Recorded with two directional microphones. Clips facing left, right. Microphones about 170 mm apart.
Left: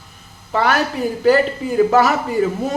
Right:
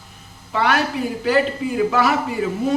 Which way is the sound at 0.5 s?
40° left (ahead or behind).